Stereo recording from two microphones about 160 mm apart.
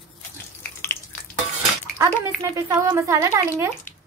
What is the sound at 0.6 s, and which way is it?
Water tap, 15° left (ahead or behind).